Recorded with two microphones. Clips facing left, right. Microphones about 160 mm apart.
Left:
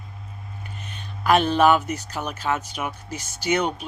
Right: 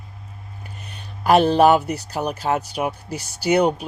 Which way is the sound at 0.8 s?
35° right (ahead or behind).